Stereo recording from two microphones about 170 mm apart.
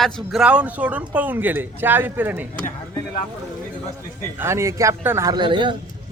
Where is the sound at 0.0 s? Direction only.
Centre (ahead or behind).